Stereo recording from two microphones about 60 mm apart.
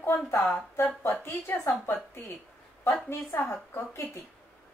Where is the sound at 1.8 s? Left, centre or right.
Left.